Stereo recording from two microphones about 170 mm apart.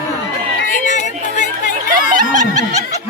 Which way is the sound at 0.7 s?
45° left (ahead or behind).